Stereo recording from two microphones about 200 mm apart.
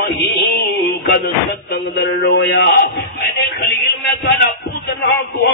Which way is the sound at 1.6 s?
60° left (ahead or behind).